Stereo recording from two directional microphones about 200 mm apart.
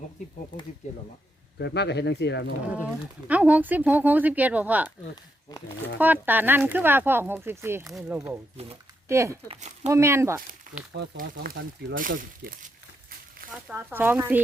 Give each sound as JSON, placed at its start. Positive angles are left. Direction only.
{"t": 0.8, "sound": "speech", "side_deg": 35}
{"t": 1.5, "sound": "speech", "side_deg": 60}
{"t": 2.7, "sound": "speech", "side_deg": -5}
{"t": 5.5, "sound": "a sound", "side_deg": 20}
{"t": 6.0, "sound": "speech", "side_deg": -10}
{"t": 8.5, "sound": "speech", "side_deg": -30}
{"t": 9.0, "sound": "speech", "side_deg": -15}
{"t": 9.5, "sound": "speech", "side_deg": -35}
{"t": 9.9, "sound": "speech", "side_deg": -15}
{"t": 10.9, "sound": "speech", "side_deg": -50}
{"t": 11.9, "sound": "crumpling", "side_deg": -45}
{"t": 13.7, "sound": "speech", "side_deg": -10}